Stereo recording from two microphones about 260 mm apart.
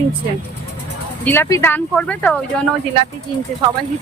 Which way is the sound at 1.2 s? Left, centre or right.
Centre.